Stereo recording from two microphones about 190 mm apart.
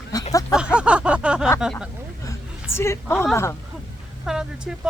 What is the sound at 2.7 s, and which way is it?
Speech, 15° left (ahead or behind).